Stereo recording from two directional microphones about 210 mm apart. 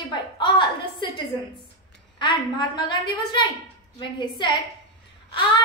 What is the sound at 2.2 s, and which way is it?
A woman's voice, 20° left (ahead or behind).